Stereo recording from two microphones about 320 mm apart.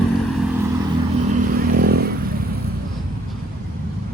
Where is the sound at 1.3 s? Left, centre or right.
Right.